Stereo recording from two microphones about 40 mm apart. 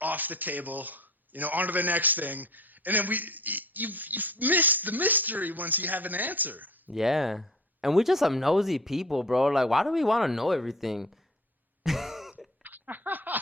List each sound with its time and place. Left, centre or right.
0.0 s a man's voice: right
6.9 s speech: centre
11.8 s throat clearing: centre
12.6 s laughter: right